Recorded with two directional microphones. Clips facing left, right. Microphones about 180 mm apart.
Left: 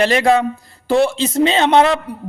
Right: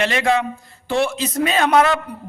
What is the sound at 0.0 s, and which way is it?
A man's voice, 35° left (ahead or behind).